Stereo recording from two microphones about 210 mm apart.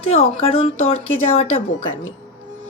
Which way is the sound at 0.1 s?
25° left (ahead or behind).